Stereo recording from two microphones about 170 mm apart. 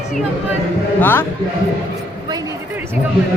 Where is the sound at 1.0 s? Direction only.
10° left (ahead or behind).